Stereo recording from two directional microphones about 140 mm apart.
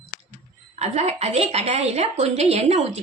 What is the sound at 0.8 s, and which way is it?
A woman's voice, 50° right (ahead or behind).